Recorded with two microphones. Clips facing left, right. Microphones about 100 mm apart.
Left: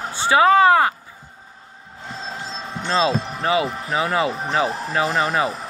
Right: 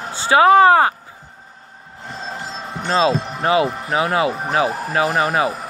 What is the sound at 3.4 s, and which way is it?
Speech, 25° right (ahead or behind).